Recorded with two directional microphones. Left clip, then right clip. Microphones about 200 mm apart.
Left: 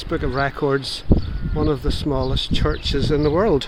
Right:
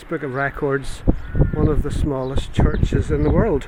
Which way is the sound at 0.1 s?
5° left (ahead or behind).